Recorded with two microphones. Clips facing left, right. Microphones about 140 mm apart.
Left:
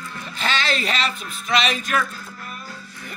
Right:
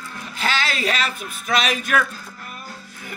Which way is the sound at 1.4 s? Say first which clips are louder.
Even; 5° right (ahead or behind).